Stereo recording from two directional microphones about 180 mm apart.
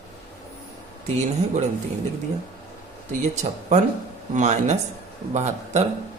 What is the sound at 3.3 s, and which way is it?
A man's voice, 40° right (ahead or behind).